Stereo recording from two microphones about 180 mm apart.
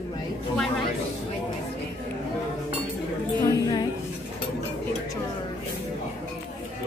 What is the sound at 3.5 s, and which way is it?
Music, 20° left (ahead or behind).